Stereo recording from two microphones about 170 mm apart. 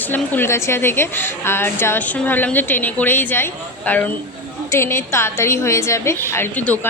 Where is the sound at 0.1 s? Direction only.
15° left (ahead or behind).